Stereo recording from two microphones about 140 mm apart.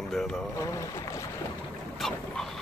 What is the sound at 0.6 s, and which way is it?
Speech, 20° left (ahead or behind).